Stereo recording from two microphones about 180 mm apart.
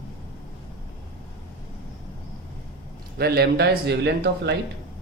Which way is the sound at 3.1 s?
60° right (ahead or behind).